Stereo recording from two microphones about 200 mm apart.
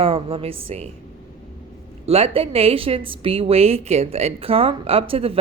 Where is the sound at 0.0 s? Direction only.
30° right (ahead or behind).